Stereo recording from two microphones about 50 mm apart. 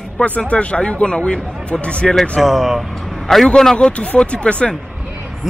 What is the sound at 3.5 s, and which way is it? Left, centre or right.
A man's voice, centre.